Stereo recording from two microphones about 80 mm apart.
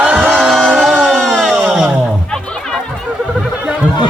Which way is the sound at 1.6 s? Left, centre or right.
Centre.